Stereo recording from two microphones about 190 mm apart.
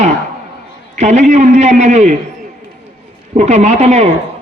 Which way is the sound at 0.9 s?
35° right (ahead or behind).